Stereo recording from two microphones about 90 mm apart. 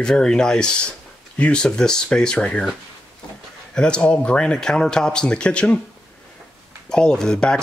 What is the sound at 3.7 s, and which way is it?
Speech, 10° left (ahead or behind).